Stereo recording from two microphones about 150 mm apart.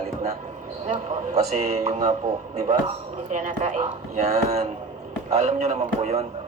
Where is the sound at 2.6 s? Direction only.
50° right (ahead or behind).